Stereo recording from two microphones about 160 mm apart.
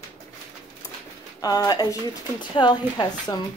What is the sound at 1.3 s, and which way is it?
Speech, 25° left (ahead or behind).